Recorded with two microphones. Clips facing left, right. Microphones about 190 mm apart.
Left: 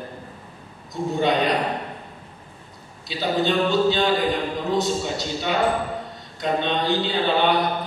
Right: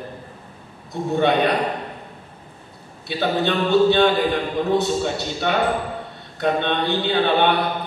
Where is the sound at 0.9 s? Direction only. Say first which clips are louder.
Right 3 dB; 60° right (ahead or behind).